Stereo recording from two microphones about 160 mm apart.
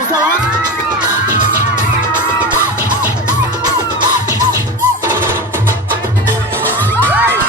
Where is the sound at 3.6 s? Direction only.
25° right (ahead or behind).